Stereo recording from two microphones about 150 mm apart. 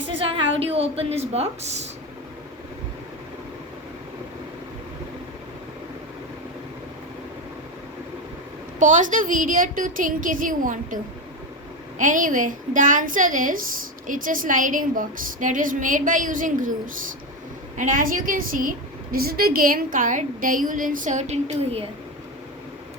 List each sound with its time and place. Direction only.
0.1 s a woman's voice: 35° right (ahead or behind)
8.8 s a woman's voice: 60° right (ahead or behind)
19.1 s a woman's voice: 85° right; by 21.8 s 45° right (ahead or behind)